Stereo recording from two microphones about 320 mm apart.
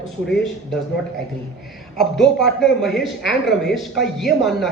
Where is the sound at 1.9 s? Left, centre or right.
Centre.